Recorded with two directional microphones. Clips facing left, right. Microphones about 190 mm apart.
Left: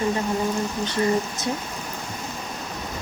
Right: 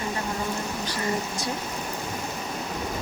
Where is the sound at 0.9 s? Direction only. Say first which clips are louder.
Left 7 dB; 20° left (ahead or behind).